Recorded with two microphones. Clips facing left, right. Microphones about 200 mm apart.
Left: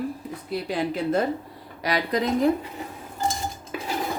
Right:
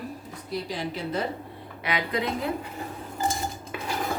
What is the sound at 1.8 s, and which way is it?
Speech, 40° left (ahead or behind).